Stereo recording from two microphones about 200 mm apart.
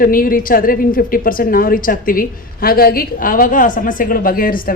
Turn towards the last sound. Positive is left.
turn(degrees=45)  # may be behind; listen again after turning